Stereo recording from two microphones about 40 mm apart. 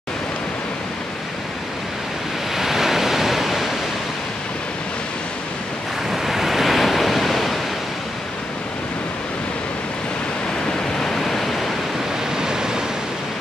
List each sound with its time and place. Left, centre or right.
2.5 s waves: centre
6.2 s waves: centre
11.0 s waves: centre
12.4 s waves: centre